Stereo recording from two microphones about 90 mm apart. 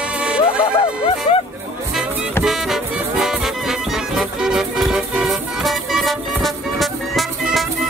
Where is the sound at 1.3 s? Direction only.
80° left.